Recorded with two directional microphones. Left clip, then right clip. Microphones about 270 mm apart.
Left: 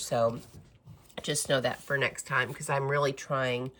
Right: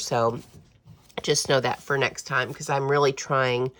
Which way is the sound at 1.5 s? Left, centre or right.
Right.